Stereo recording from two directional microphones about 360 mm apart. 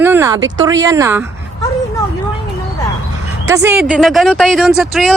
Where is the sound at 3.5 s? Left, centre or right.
Centre.